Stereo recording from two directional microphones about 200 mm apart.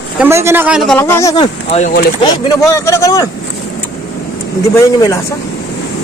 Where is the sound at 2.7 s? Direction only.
15° left (ahead or behind).